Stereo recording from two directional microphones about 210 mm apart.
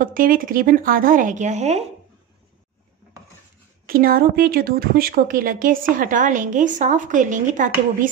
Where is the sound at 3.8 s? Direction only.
45° right (ahead or behind).